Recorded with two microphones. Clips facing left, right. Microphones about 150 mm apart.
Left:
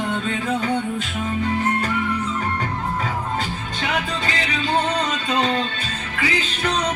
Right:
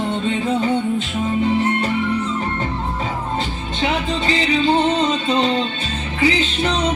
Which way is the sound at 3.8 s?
25° right (ahead or behind).